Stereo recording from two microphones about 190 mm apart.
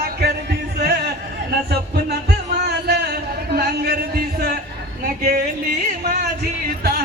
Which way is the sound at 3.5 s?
55° right (ahead or behind).